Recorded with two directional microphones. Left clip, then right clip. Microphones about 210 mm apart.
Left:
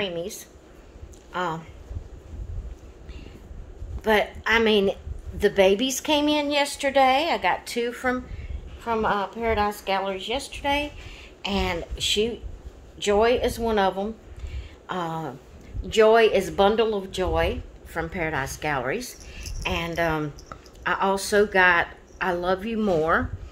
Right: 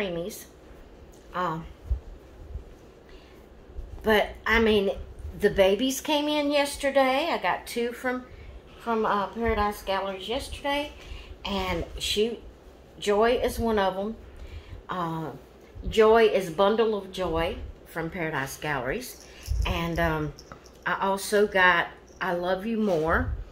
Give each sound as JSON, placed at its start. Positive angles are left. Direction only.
{"t": 0.0, "sound": "speech", "side_deg": 45}
{"t": 4.0, "sound": "speech", "side_deg": 50}